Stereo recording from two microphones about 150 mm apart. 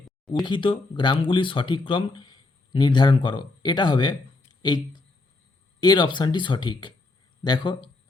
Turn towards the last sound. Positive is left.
turn(degrees=30)  # may be behind; listen again after turning